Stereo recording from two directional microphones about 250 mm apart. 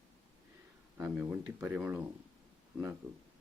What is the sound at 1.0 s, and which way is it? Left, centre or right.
Speech, centre.